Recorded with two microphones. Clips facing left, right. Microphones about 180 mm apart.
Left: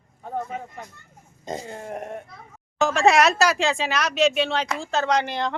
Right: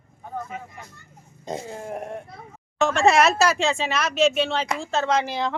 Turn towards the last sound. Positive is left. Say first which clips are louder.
# even
turn(degrees=0)  # may be behind; listen again after turning